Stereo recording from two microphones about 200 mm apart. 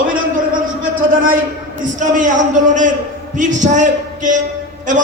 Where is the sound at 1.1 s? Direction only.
45° right (ahead or behind).